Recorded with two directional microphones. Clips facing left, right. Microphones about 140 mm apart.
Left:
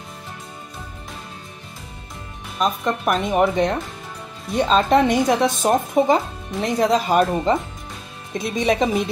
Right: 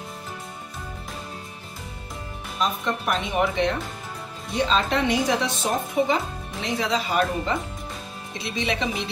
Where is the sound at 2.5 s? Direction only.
45° left (ahead or behind).